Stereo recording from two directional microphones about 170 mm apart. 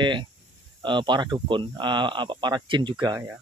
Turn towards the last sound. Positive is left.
turn(degrees=-25)  # may be behind; listen again after turning